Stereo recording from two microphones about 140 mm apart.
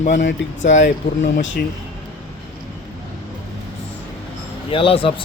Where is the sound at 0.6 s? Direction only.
55° left (ahead or behind).